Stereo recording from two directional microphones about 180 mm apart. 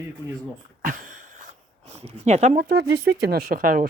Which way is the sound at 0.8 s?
50° right (ahead or behind).